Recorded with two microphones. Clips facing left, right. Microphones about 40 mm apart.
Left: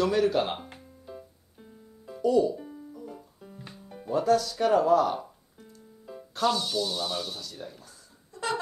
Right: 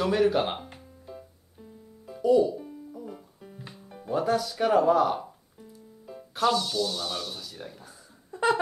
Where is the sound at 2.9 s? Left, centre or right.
Centre.